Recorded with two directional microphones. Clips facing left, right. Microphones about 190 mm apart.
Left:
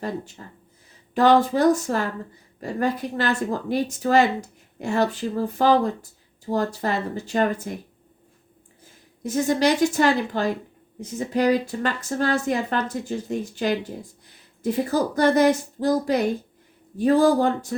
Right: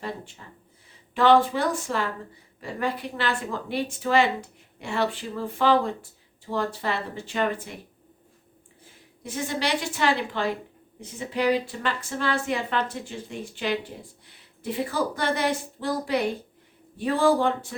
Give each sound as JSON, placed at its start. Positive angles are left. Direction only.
{"t": 0.0, "sound": "a sound", "side_deg": 45}
{"t": 1.1, "sound": "a woman's voice", "side_deg": 40}
{"t": 9.2, "sound": "a woman's voice", "side_deg": 45}